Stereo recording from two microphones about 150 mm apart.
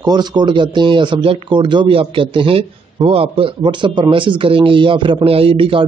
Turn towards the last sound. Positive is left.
turn(degrees=-35)  # may be behind; listen again after turning